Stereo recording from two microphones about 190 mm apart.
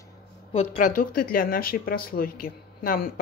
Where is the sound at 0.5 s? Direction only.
35° left (ahead or behind).